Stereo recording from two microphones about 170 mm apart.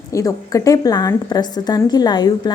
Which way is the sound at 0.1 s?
20° left (ahead or behind).